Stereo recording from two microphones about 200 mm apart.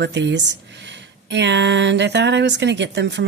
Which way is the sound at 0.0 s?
60° right (ahead or behind).